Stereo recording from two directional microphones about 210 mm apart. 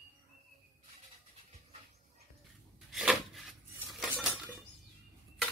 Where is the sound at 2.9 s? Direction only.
Centre (ahead or behind).